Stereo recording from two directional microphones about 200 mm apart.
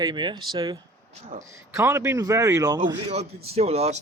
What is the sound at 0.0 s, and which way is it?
Speech, 20° right (ahead or behind).